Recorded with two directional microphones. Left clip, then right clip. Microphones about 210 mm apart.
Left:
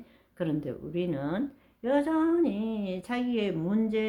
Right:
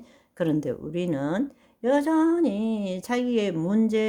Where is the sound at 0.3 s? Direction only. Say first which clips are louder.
Right 6 dB; 40° right (ahead or behind).